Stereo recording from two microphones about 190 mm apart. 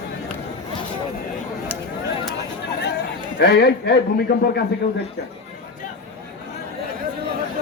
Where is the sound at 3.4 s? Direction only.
60° left (ahead or behind).